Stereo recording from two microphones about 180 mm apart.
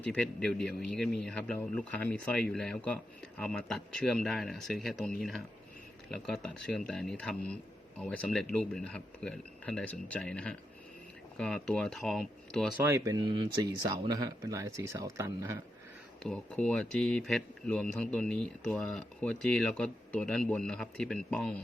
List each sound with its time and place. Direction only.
0.0 s speech: 5° left (ahead or behind)
12.8 s speech: 20° right (ahead or behind)
16.2 s speech: 5° left (ahead or behind)